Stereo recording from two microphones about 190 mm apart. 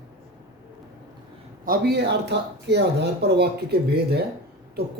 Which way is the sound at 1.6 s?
55° right (ahead or behind).